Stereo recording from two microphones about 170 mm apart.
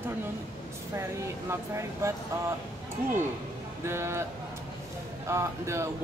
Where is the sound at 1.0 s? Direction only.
15° right (ahead or behind).